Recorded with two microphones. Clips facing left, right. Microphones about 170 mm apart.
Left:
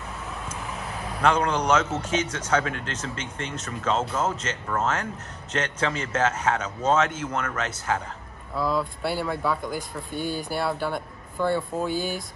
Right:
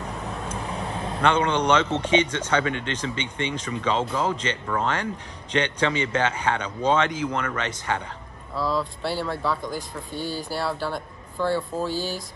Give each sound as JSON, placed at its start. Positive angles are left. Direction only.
{"t": 0.8, "sound": "vehicle", "side_deg": -30}
{"t": 1.2, "sound": "speech", "side_deg": 5}
{"t": 10.1, "sound": "speech", "side_deg": 55}
{"t": 11.4, "sound": "speech", "side_deg": -5}
{"t": 11.9, "sound": "speech", "side_deg": 55}